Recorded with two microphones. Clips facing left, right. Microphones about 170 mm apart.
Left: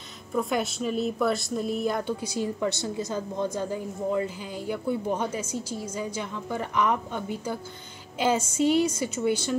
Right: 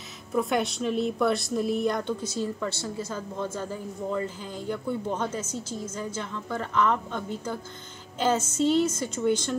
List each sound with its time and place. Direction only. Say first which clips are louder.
0.3 s speech: right 1 dB; centre (ahead or behind)